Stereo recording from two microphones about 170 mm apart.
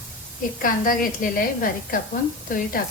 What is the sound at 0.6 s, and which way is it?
A woman's voice, 55° left (ahead or behind).